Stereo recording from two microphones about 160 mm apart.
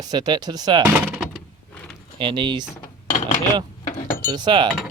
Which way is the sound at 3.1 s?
50° left (ahead or behind).